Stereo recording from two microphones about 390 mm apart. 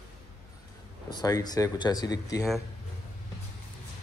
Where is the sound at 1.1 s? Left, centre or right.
Centre.